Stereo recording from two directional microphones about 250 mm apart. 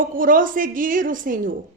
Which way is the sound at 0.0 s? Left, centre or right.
Right.